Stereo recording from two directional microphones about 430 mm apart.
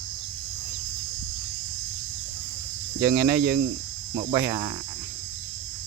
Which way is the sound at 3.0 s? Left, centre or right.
Centre.